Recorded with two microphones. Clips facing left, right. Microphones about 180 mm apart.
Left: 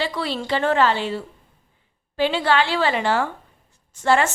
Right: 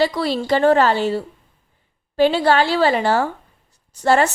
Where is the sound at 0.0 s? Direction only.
40° right (ahead or behind).